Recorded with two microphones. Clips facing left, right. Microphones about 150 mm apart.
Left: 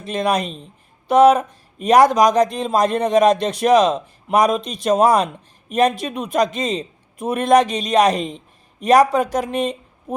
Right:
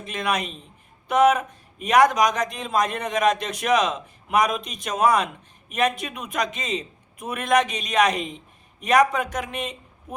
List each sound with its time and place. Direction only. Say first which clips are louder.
0.0 s speech: left 6 dB; 35° left (ahead or behind)